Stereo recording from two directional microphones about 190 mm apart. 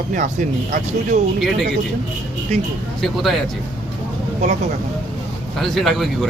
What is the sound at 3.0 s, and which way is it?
Speech, centre (ahead or behind).